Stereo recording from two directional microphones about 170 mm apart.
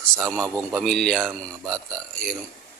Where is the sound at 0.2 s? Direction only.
5° left (ahead or behind).